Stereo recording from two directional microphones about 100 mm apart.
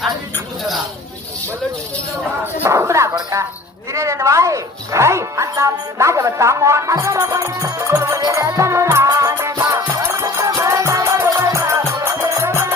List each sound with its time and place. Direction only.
2.6 s a sound: 30° right (ahead or behind)
3.9 s speech: 30° right (ahead or behind)
9.0 s music: 30° right (ahead or behind)